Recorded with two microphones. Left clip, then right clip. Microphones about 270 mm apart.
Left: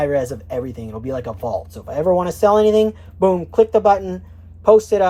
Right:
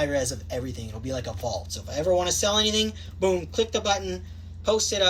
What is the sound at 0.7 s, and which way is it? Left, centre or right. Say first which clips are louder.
Speech: left 7 dB; left.